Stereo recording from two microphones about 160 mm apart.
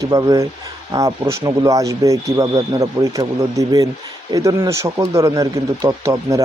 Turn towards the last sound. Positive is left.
turn(degrees=-20)  # may be behind; listen again after turning